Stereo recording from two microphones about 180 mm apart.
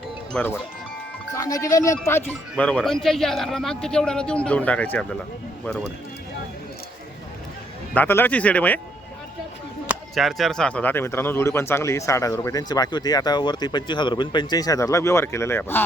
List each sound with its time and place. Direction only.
0.3 s speech: 10° left (ahead or behind)
2.6 s a man's voice: 5° left (ahead or behind)
7.9 s speech: 10° left (ahead or behind)
9.9 s speech: centre (ahead or behind)